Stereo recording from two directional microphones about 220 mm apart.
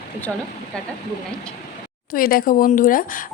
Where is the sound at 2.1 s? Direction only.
40° left (ahead or behind).